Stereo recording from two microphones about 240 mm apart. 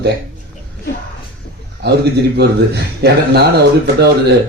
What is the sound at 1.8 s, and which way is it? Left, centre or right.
A man's voice, right.